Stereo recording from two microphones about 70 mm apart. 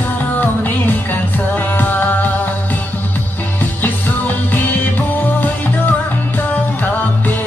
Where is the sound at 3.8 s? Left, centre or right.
Left.